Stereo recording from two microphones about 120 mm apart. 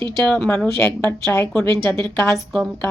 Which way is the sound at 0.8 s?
25° left (ahead or behind).